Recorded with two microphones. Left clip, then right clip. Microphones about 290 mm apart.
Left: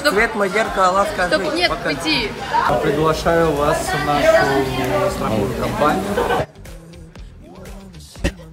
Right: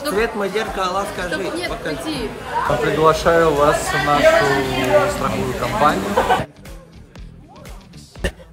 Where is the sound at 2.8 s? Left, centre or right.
Centre.